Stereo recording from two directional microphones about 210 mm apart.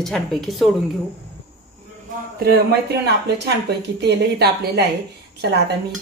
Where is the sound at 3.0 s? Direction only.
50° right (ahead or behind).